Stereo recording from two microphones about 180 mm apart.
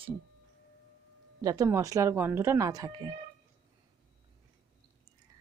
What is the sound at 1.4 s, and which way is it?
Speech, 20° right (ahead or behind).